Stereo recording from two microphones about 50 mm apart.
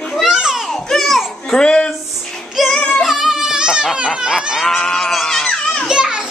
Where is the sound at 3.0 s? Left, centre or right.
Centre.